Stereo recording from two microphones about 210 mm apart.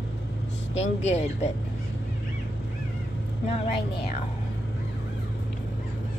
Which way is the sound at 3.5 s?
30° left (ahead or behind).